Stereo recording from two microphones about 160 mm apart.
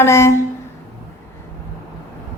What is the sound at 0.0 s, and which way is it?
Speech, 15° left (ahead or behind).